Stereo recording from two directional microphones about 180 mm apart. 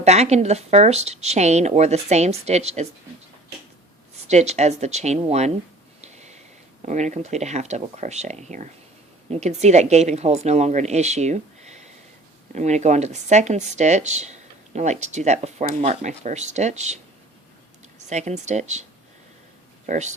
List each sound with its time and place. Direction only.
0.0 s speech: 40° right (ahead or behind)
4.3 s speech: 40° right (ahead or behind)
6.0 s a sound: 40° right (ahead or behind)
6.8 s speech: 40° right (ahead or behind)
18.1 s speech: 40° right (ahead or behind)
19.9 s speech: 40° right (ahead or behind)